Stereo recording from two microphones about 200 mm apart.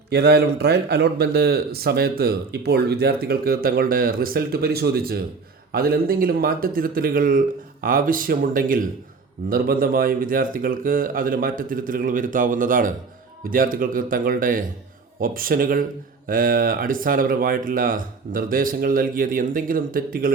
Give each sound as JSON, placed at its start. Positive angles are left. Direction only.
{"t": 0.1, "sound": "speech", "side_deg": -55}